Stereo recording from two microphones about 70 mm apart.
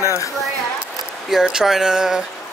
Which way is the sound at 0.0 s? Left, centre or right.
Left.